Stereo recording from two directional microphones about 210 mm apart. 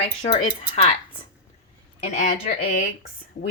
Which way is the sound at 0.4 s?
30° left (ahead or behind).